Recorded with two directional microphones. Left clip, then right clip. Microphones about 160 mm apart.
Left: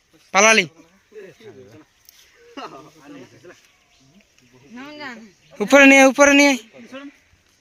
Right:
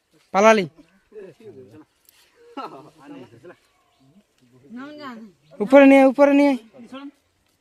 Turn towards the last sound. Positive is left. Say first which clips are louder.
# left 2 dB
turn(degrees=-20)  # may be behind; listen again after turning